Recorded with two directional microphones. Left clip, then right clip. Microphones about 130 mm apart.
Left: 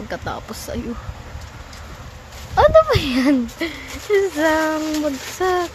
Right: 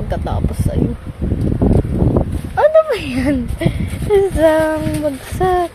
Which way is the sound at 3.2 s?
Centre (ahead or behind).